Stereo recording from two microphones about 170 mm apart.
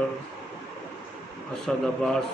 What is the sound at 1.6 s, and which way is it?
Speech, 5° left (ahead or behind).